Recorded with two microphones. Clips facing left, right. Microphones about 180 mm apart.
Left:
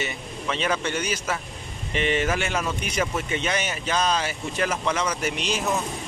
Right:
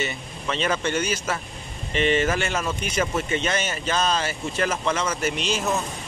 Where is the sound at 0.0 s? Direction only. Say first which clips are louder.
Right 1 dB; 10° left (ahead or behind).